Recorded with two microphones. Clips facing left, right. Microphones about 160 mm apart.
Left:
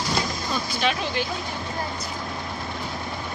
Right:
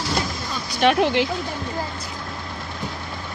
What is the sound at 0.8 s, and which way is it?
Speech, 70° right (ahead or behind).